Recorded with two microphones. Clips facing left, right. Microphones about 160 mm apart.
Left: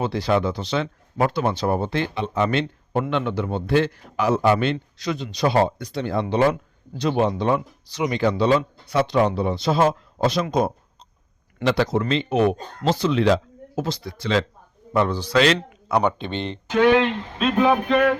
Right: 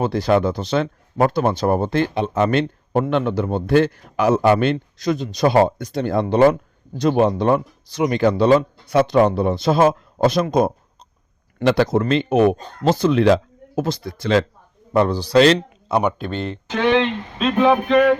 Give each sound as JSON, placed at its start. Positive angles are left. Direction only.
{"t": 0.0, "sound": "speech", "side_deg": -45}
{"t": 14.9, "sound": "a man's voice", "side_deg": -35}
{"t": 16.0, "sound": "speech", "side_deg": -5}